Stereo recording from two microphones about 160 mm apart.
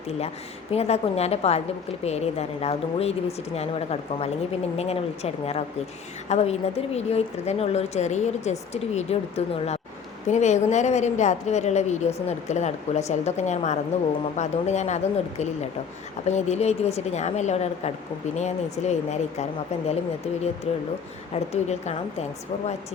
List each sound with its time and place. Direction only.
0.7 s a woman's voice: 40° left (ahead or behind)